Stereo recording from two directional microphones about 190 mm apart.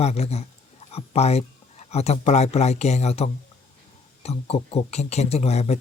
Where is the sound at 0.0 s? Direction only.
35° left (ahead or behind).